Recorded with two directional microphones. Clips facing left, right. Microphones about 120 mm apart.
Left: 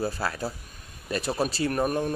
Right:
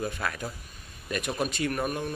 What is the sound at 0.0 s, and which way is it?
Speech, 30° left (ahead or behind).